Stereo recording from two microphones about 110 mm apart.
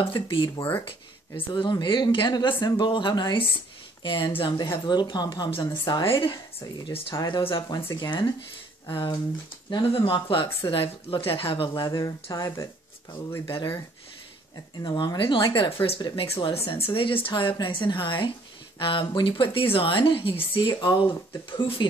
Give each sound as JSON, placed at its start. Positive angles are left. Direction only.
{"t": 0.0, "sound": "speech", "side_deg": 50}
{"t": 7.2, "sound": "speech", "side_deg": 40}
{"t": 11.7, "sound": "speech", "side_deg": 40}
{"t": 14.8, "sound": "speech", "side_deg": 40}